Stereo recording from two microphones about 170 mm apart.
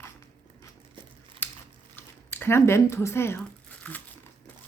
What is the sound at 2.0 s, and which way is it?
Speech, 15° left (ahead or behind).